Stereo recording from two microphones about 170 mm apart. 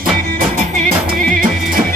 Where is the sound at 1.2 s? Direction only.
55° right (ahead or behind).